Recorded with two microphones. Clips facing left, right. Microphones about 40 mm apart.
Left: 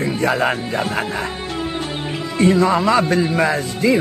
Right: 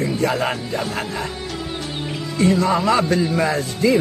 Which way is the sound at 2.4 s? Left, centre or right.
Left.